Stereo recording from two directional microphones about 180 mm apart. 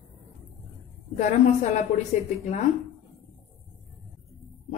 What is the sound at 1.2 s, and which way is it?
Speech, 45° left (ahead or behind).